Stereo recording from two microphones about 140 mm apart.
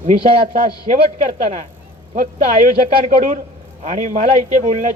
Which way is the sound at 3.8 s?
70° right (ahead or behind).